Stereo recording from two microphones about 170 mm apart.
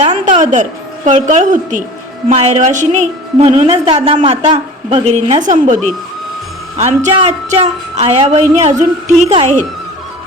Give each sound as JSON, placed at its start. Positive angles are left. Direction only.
{"t": 0.0, "sound": "a woman's voice", "side_deg": -40}